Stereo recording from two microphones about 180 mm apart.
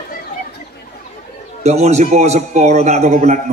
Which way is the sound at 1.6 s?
40° right (ahead or behind).